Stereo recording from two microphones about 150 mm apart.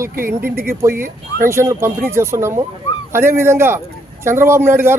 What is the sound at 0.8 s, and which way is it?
Speech, 15° right (ahead or behind).